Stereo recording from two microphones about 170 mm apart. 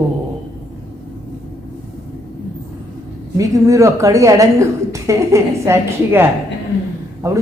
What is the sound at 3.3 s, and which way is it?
A woman's voice, 20° right (ahead or behind).